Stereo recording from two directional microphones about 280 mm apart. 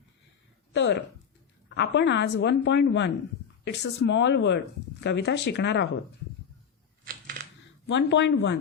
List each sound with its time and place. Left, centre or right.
0.7 s a sound: left
2.0 s speech: left
7.0 s coin: right
7.9 s speech: left